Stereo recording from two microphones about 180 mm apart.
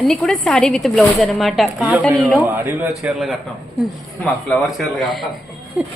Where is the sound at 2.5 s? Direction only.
10° right (ahead or behind).